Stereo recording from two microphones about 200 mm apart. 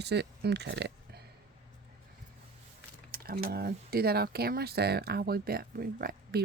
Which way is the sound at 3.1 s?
50° right (ahead or behind).